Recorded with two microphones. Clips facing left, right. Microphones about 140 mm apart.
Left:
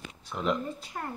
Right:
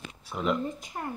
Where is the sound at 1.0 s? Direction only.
15° right (ahead or behind).